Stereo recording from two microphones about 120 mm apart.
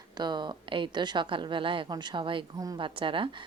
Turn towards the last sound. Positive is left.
turn(degrees=-45)  # may be behind; listen again after turning